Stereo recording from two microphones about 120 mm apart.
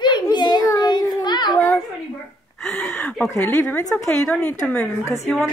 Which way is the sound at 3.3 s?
20° left (ahead or behind).